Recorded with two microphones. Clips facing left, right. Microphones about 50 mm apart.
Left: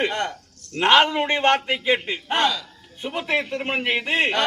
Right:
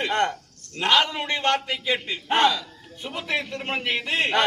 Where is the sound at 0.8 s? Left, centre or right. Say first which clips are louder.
Left 5 dB; left.